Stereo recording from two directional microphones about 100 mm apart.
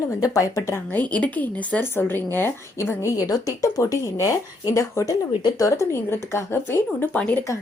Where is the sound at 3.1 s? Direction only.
35° left (ahead or behind).